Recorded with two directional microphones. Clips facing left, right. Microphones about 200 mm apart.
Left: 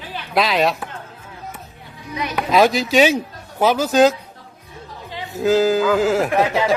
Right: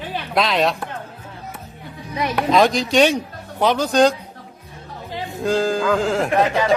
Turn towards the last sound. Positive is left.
turn(degrees=5)  # may be behind; listen again after turning